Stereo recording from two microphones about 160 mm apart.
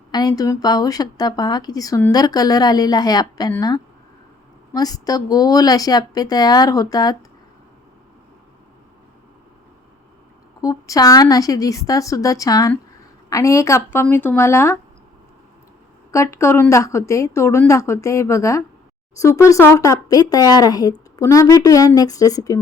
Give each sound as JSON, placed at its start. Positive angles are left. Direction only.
{"t": 0.1, "sound": "speech", "side_deg": 25}
{"t": 4.7, "sound": "speech", "side_deg": 25}
{"t": 10.6, "sound": "a woman's voice", "side_deg": 20}
{"t": 16.1, "sound": "a woman's voice", "side_deg": 15}